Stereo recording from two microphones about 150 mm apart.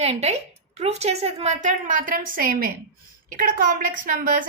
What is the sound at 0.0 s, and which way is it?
A woman's voice, 45° right (ahead or behind).